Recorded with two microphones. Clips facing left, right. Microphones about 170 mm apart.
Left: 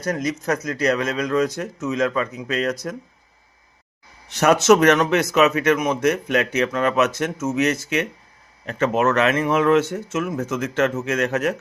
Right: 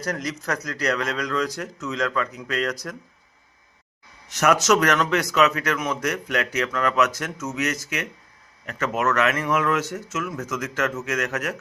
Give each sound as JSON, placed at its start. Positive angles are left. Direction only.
{"t": 0.0, "sound": "speech", "side_deg": 20}
{"t": 4.3, "sound": "speech", "side_deg": 30}